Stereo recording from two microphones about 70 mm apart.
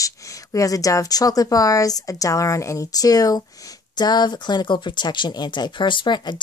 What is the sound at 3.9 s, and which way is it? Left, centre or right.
Speech, left.